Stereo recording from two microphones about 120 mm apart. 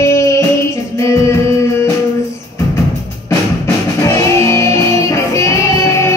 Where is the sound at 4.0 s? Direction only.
25° left (ahead or behind).